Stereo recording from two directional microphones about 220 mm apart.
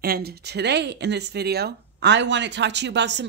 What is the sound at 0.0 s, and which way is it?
Speech, 45° right (ahead or behind).